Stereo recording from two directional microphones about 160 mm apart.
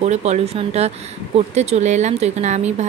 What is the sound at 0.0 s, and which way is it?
Speech, 45° right (ahead or behind).